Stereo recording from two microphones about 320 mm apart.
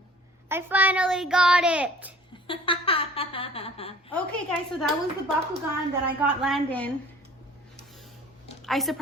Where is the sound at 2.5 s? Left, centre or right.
Centre.